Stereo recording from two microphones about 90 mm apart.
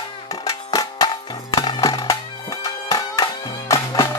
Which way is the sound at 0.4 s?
40° left (ahead or behind).